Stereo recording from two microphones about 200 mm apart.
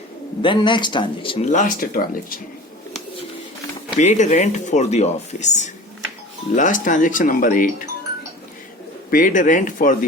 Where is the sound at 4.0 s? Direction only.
35° left (ahead or behind).